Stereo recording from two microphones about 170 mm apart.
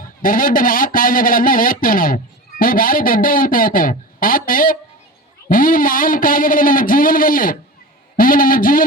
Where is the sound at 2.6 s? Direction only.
55° left (ahead or behind).